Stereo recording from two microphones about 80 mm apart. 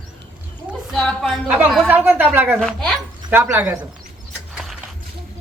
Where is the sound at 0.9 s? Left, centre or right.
Centre.